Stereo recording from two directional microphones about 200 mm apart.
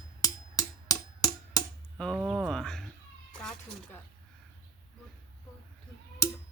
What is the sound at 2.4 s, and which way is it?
Speech, centre (ahead or behind).